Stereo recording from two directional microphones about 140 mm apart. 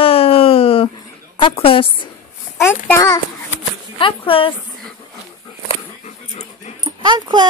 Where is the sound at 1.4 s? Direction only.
40° left (ahead or behind).